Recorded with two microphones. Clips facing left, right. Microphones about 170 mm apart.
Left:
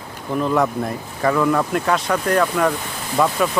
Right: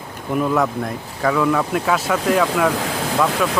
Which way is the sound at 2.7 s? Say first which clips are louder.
Right 6 dB; 90° right.